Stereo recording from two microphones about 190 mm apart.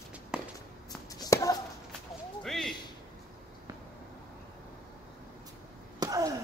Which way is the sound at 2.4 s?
Centre (ahead or behind).